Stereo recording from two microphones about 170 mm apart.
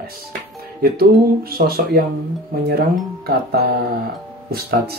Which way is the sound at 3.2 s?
70° right (ahead or behind).